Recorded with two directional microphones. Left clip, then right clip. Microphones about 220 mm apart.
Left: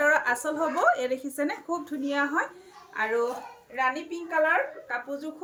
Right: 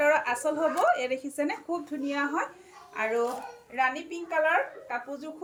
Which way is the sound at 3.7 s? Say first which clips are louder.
Even; 10° left (ahead or behind).